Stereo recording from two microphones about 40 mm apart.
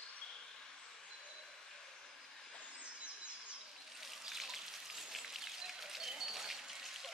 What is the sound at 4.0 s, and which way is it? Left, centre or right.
Raindrop, centre.